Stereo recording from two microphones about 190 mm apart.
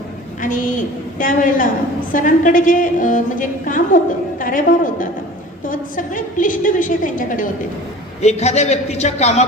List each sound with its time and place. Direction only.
0.4 s a woman's voice: 45° left (ahead or behind)
8.2 s a man's voice: 35° left (ahead or behind)